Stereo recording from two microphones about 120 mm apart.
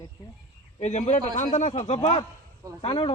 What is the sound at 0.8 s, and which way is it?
Speech, 75° left (ahead or behind).